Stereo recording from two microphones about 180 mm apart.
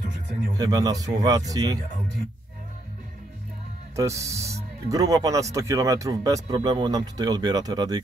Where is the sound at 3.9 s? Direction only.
15° right (ahead or behind).